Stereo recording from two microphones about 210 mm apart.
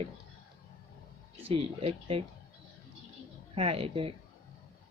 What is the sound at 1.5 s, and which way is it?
Speech, 25° right (ahead or behind).